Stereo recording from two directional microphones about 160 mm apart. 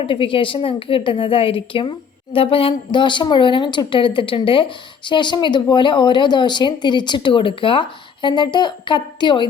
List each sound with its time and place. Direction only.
0.0 s a woman's voice: 35° left (ahead or behind)